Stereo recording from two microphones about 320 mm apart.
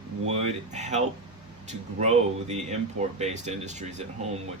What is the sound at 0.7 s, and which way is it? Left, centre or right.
Speech, right.